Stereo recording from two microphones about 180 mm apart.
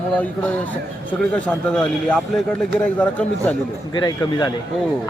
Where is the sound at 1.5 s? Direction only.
5° left (ahead or behind).